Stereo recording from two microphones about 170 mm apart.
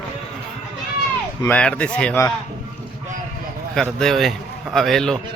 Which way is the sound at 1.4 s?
10° left (ahead or behind).